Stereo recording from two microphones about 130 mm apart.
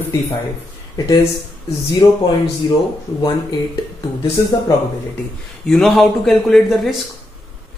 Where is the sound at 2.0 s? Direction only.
30° left (ahead or behind).